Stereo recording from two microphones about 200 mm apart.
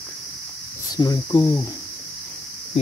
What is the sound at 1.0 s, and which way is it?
Speech, 20° left (ahead or behind).